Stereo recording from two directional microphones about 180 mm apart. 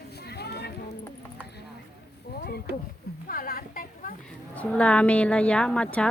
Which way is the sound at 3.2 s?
55° left (ahead or behind).